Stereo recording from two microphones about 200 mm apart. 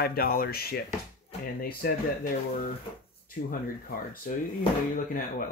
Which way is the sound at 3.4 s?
40° left (ahead or behind).